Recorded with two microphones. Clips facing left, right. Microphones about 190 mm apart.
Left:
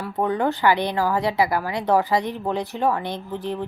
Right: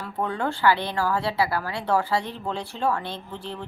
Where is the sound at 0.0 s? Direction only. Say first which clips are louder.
Left 5 dB; 15° left (ahead or behind).